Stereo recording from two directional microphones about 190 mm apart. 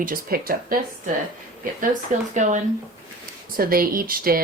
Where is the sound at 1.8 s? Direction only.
40° right (ahead or behind).